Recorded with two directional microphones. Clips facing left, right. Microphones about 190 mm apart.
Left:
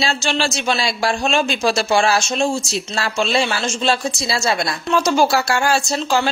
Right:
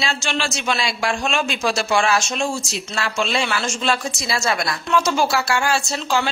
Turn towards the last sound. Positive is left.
turn(degrees=40)  # may be behind; listen again after turning